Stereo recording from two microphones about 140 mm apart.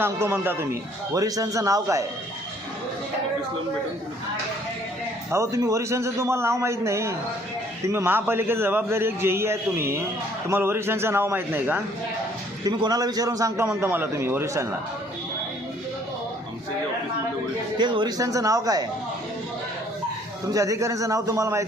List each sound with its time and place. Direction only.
0.0 s a man's voice: 15° right (ahead or behind)
5.3 s a man's voice: 20° right (ahead or behind)
12.6 s a man's voice: 30° right (ahead or behind)
17.7 s a man's voice: 30° right (ahead or behind)
20.5 s a man's voice: 25° right (ahead or behind)